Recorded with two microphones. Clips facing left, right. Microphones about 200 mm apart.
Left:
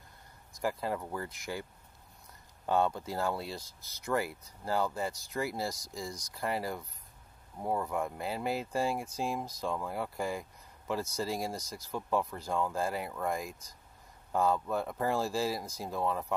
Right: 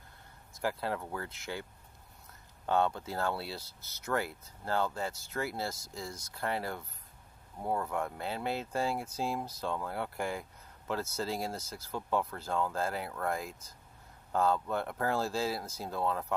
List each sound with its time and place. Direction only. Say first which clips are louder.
0.5 s speech: left 1 dB; centre (ahead or behind)